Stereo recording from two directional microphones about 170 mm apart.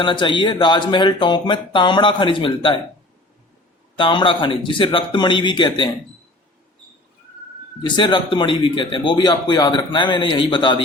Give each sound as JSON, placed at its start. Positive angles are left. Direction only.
{"t": 0.0, "sound": "speech", "side_deg": 30}
{"t": 3.9, "sound": "speech", "side_deg": 30}
{"t": 7.8, "sound": "speech", "side_deg": 25}